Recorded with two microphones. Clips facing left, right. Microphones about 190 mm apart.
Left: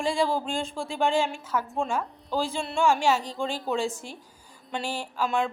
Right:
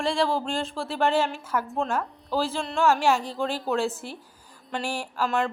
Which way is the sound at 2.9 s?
10° right (ahead or behind).